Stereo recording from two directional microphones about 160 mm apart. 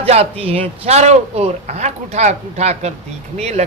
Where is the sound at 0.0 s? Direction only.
40° right (ahead or behind).